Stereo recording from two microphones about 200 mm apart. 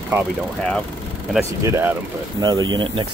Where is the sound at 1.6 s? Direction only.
10° right (ahead or behind).